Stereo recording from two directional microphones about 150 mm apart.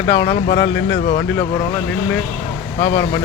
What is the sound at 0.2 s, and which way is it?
Speech, 35° left (ahead or behind).